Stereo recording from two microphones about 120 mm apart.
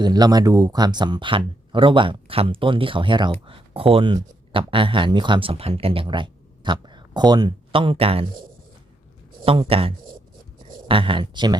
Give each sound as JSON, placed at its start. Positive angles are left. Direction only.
{"t": 0.0, "sound": "speech", "side_deg": -35}
{"t": 7.7, "sound": "speech", "side_deg": -45}
{"t": 9.4, "sound": "speech", "side_deg": -50}